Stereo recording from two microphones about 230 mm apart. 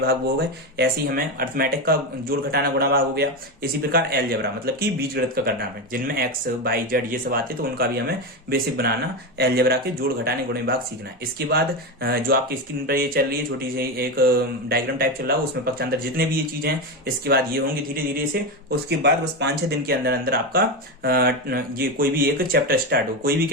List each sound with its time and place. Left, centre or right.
0.0 s speech: right
17.2 s speech: right